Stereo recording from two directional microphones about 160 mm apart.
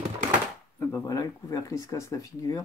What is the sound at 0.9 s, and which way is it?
Speech, 20° left (ahead or behind).